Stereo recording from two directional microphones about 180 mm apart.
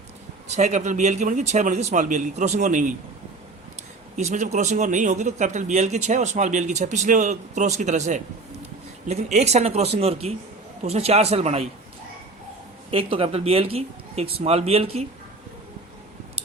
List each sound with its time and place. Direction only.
0.4 s a man's voice: 40° right (ahead or behind)
4.2 s a man's voice: 40° right (ahead or behind)
12.9 s a man's voice: 30° right (ahead or behind)